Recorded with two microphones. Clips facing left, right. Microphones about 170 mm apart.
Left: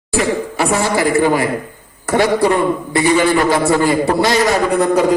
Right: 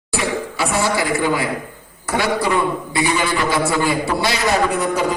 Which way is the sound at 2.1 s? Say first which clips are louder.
Left 5 dB; 45° left (ahead or behind).